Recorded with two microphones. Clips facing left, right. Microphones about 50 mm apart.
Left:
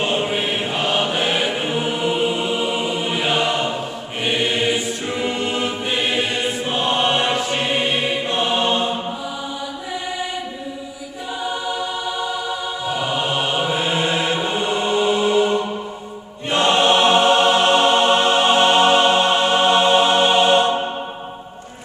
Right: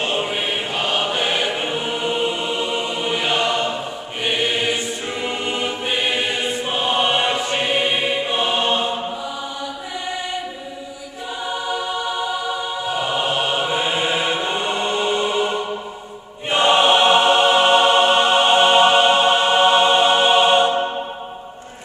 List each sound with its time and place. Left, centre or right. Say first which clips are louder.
0.0 s choir: left 2 dB; centre
11.4 s choir: even; centre